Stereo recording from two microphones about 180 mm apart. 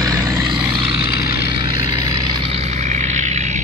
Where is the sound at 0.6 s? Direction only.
25° right (ahead or behind).